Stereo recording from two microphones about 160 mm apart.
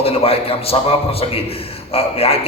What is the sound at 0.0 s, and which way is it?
Speech, 40° left (ahead or behind).